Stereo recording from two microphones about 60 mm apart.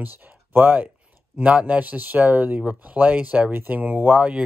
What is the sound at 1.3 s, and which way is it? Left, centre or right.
Speech, centre.